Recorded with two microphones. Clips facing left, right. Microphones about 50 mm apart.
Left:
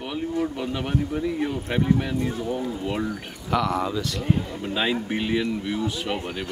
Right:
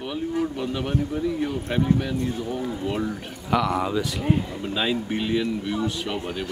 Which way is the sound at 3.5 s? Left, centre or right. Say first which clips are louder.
Right 1 dB; centre.